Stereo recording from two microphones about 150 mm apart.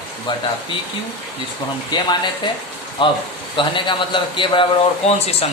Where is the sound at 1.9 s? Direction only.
30° left (ahead or behind).